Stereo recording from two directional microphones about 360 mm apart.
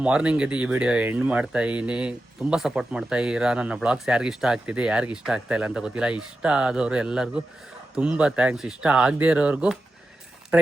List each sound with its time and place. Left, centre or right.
0.0 s speech: centre